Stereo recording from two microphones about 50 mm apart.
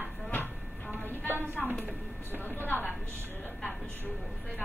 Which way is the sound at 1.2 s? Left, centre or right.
Right.